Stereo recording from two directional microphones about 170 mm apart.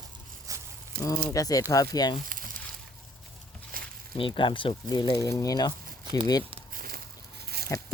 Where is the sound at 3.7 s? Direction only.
55° right (ahead or behind).